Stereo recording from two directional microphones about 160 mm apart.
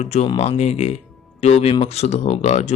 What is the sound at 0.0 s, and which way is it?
Speech, 45° left (ahead or behind).